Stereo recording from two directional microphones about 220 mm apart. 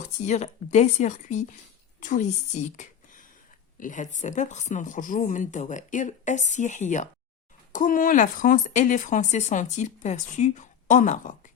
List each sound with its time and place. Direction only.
0.3 s speech: 30° left (ahead or behind)